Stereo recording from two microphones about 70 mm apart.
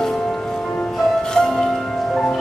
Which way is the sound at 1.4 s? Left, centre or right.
Centre.